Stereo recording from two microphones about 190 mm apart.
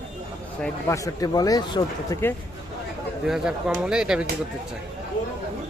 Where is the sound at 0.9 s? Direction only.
20° left (ahead or behind).